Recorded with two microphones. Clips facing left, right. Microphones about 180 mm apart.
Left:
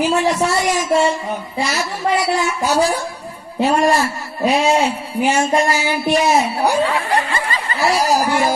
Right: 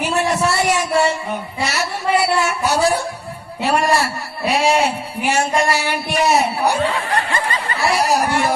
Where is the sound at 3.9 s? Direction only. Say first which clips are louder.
Left 1 dB; 70° right (ahead or behind).